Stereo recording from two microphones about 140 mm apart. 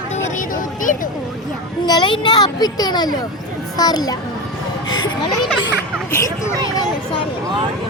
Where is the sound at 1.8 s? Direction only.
30° left (ahead or behind).